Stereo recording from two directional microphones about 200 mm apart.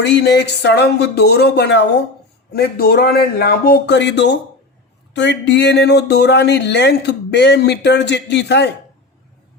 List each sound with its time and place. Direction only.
0.0 s a man's voice: 60° left (ahead or behind)